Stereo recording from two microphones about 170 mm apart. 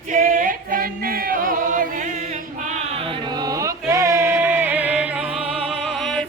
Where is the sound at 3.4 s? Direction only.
20° right (ahead or behind).